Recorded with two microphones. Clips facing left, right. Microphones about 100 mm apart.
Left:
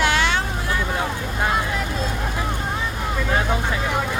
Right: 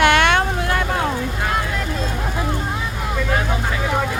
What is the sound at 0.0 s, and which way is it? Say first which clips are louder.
Vehicle: right 5 dB; 60° right (ahead or behind).